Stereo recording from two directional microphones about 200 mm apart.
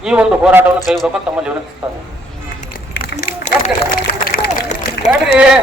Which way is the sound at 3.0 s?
45° left (ahead or behind).